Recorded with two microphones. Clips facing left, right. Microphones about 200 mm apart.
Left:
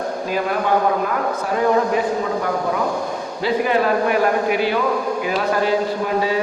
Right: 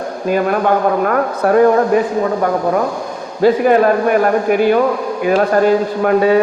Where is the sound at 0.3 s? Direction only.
55° right (ahead or behind).